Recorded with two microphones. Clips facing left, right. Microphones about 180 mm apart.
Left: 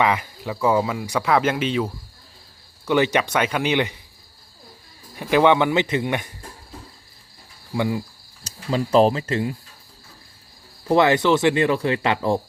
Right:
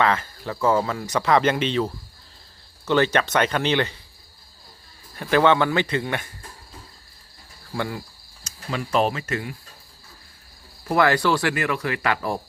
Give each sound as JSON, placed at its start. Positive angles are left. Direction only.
{"t": 0.0, "sound": "speech", "side_deg": 10}
{"t": 5.1, "sound": "speech", "side_deg": 15}
{"t": 7.7, "sound": "speech", "side_deg": 15}
{"t": 8.4, "sound": "speech", "side_deg": 30}
{"t": 10.8, "sound": "speech", "side_deg": 20}